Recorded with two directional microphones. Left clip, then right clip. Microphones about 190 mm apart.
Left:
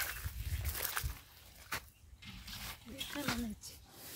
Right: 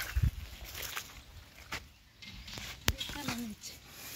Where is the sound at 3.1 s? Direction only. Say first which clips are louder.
Even; 10° right (ahead or behind).